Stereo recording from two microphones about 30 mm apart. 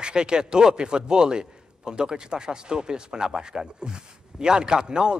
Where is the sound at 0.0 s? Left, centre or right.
Right.